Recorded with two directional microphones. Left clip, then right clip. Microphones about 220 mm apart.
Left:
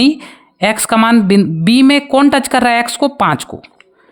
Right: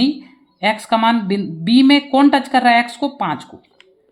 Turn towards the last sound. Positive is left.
turn(degrees=55)  # may be behind; listen again after turning